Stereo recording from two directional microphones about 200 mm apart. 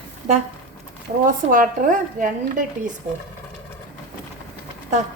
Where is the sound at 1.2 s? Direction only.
40° right (ahead or behind).